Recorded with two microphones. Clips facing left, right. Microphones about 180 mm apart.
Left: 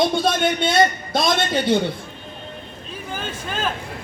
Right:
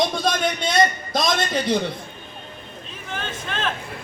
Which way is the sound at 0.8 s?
30° left (ahead or behind).